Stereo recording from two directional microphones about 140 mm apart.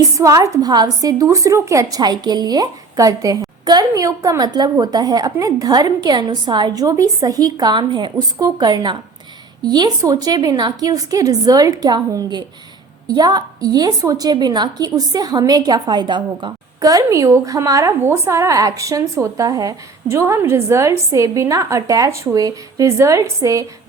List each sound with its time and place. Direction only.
0.2 s a woman's voice: 25° right (ahead or behind)